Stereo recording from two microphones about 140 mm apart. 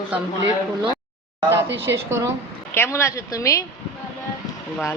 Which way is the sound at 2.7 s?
15° left (ahead or behind).